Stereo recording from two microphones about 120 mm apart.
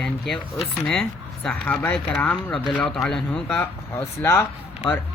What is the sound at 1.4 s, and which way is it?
Speech, 10° left (ahead or behind).